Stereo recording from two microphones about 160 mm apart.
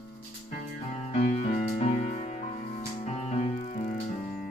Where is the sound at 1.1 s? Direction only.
45° left (ahead or behind).